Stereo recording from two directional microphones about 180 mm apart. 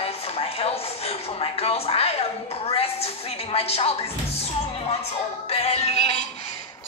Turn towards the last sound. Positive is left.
turn(degrees=35)  # may be behind; listen again after turning